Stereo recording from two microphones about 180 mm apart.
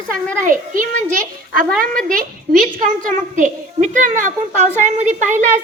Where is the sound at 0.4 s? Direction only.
45° right (ahead or behind).